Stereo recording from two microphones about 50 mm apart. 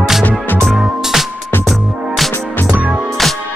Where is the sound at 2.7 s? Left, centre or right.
Right.